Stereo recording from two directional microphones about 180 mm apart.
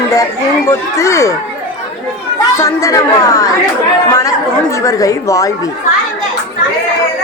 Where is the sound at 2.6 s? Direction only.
15° left (ahead or behind).